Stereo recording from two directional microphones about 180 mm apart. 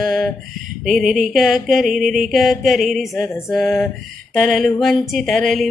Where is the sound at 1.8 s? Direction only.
50° right (ahead or behind).